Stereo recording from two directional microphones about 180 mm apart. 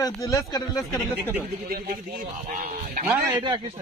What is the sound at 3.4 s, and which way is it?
Speech, 30° right (ahead or behind).